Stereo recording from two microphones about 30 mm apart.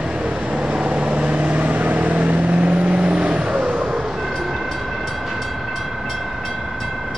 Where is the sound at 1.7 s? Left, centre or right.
Right.